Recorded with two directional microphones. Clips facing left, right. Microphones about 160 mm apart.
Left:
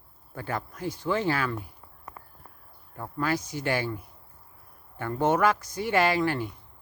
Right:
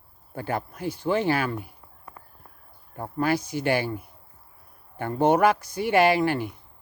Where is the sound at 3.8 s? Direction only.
15° right (ahead or behind).